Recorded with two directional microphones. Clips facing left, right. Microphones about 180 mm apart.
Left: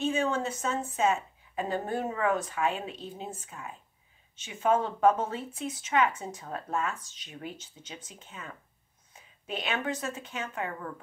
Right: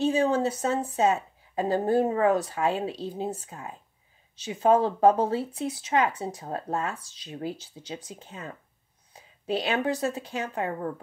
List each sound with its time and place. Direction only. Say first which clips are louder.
0.0 s speech: right 5 dB; 35° right (ahead or behind)